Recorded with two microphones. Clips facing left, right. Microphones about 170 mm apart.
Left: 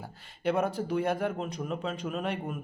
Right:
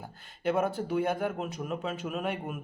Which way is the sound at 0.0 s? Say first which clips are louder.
Left 1 dB; centre (ahead or behind).